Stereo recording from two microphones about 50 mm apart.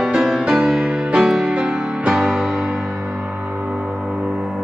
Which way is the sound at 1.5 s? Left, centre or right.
Right.